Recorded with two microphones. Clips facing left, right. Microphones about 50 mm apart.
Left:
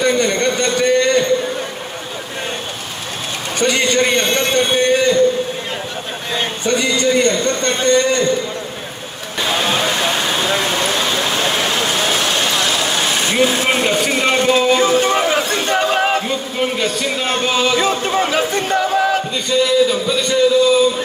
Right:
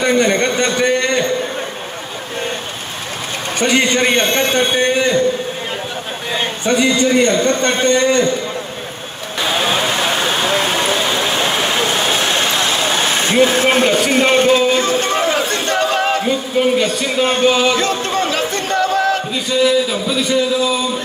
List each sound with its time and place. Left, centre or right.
0.0 s a sound: right
3.6 s a man's voice: right
6.7 s a man's voice: right
11.1 s vehicle: right
14.1 s a man's voice: right
14.8 s a sound: centre
16.2 s a man's voice: centre
17.7 s a sound: centre
19.5 s a man's voice: centre